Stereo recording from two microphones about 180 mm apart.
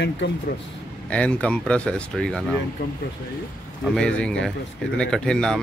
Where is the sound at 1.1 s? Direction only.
5° left (ahead or behind).